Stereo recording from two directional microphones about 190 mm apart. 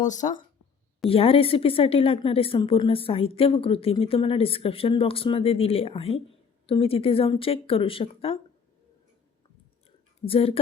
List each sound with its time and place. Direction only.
0.0 s speech: 40° left (ahead or behind)
1.1 s speech: 30° left (ahead or behind)
10.2 s speech: 30° left (ahead or behind)